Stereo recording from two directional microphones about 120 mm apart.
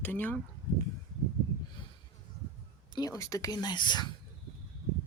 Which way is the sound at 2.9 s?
30° left (ahead or behind).